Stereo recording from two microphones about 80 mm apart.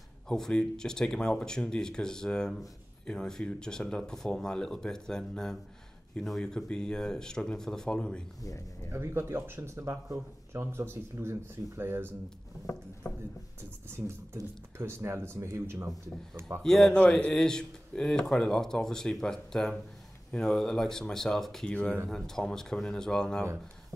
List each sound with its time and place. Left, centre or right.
0.3 s speech: centre
8.4 s speech: left
8.9 s speech: right
13.8 s speech: right
16.6 s speech: centre
16.9 s speech: centre